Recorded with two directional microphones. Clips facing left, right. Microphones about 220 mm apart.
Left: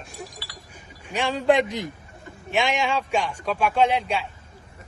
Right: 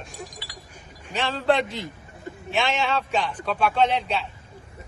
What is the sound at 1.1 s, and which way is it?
A man's voice, 15° left (ahead or behind).